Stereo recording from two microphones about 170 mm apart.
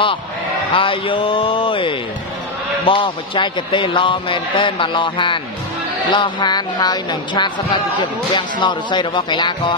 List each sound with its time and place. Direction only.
0.7 s speech: 30° left (ahead or behind)